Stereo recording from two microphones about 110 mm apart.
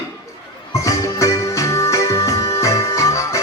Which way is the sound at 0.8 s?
30° left (ahead or behind).